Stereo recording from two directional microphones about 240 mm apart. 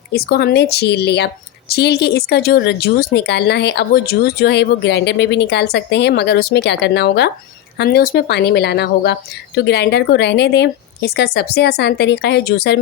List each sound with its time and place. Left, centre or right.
0.1 s a woman's voice: left